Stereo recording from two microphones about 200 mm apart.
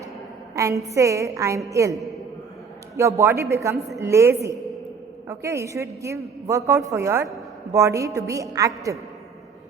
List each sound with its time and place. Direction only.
0.5 s a man's voice: 15° right (ahead or behind)